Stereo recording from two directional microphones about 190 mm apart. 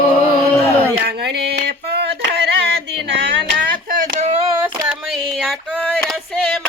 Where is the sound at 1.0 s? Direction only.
60° right (ahead or behind).